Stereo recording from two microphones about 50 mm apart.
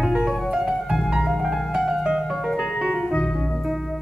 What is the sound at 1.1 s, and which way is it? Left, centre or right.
Piano, centre.